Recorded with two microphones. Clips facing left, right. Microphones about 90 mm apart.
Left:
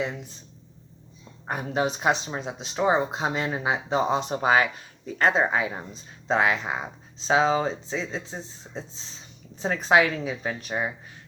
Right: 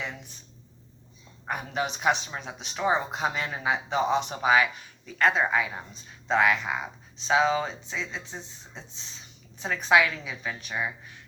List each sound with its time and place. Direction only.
1.5 s speech: 30° left (ahead or behind)